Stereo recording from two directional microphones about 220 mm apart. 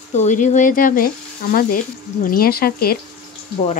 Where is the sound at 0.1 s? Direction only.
30° left (ahead or behind).